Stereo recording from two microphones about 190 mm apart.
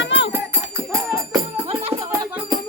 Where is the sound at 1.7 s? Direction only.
30° right (ahead or behind).